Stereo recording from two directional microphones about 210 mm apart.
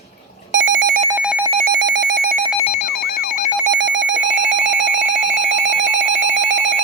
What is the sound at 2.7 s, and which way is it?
Telephone bell ringing, 40° left (ahead or behind).